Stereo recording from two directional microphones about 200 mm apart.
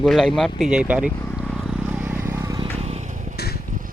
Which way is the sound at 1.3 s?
Centre (ahead or behind).